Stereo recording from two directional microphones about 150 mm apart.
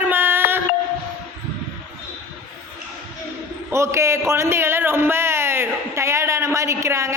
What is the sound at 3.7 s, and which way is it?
A man's voice, 20° right (ahead or behind).